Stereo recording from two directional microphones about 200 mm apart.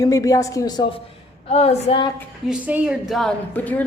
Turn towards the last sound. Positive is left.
turn(degrees=10)  # may be behind; listen again after turning